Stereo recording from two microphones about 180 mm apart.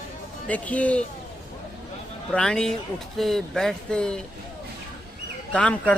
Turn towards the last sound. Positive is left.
turn(degrees=5)  # may be behind; listen again after turning